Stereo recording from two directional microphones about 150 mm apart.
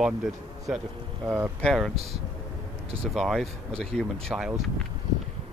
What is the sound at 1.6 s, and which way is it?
Speech, centre (ahead or behind).